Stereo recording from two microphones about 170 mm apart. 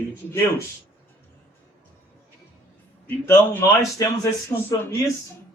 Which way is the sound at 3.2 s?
20° left (ahead or behind).